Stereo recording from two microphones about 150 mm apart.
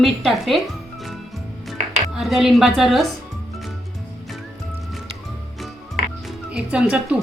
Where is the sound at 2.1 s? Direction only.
Centre (ahead or behind).